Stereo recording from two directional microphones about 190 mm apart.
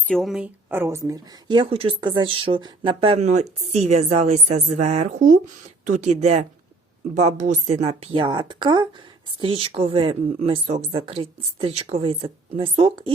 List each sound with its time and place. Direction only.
0.1 s a woman's voice: centre (ahead or behind); by 13.1 s 30° right (ahead or behind)